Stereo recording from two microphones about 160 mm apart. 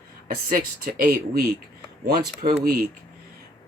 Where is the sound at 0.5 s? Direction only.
65° right (ahead or behind).